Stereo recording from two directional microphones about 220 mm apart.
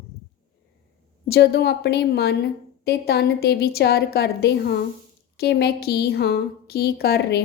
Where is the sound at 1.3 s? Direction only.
45° left (ahead or behind).